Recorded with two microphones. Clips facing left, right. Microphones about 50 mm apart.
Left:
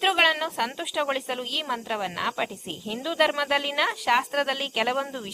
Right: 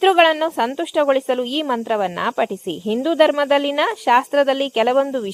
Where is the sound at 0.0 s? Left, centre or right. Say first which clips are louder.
Right 9 dB; centre.